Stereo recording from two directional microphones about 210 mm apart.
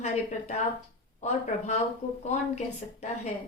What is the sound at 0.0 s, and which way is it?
Speech, 35° left (ahead or behind).